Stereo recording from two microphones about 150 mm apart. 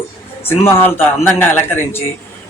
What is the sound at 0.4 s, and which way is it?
Speech, 15° left (ahead or behind).